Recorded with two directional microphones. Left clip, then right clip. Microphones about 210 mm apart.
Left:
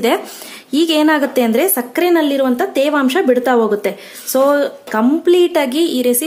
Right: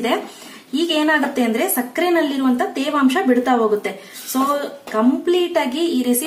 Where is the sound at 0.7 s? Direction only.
55° left (ahead or behind).